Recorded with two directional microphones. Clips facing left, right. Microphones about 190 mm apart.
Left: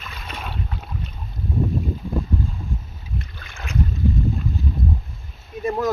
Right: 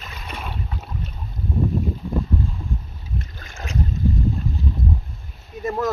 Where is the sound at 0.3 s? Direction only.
5° right (ahead or behind).